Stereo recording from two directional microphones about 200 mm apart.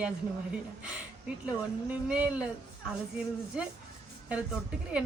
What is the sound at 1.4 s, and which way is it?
Speech, 5° right (ahead or behind).